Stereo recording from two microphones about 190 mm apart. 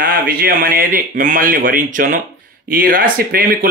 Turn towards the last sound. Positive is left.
turn(degrees=-50)  # may be behind; listen again after turning